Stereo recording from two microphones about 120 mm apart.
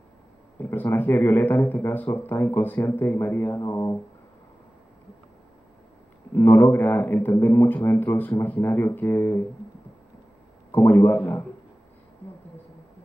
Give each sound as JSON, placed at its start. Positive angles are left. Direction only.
{"t": 0.6, "sound": "speech", "side_deg": 15}
{"t": 6.3, "sound": "speech", "side_deg": 15}
{"t": 10.7, "sound": "speech", "side_deg": 15}